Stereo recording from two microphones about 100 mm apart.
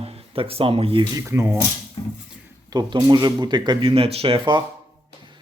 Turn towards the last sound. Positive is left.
turn(degrees=-60)  # may be behind; listen again after turning